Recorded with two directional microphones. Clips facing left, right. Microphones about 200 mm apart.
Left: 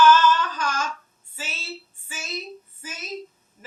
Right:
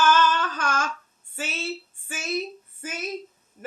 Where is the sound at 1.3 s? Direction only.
55° right (ahead or behind).